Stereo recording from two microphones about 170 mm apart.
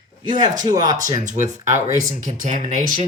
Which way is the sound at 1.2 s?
45° right (ahead or behind).